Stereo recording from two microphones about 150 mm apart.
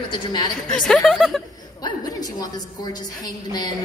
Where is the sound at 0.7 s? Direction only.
5° left (ahead or behind).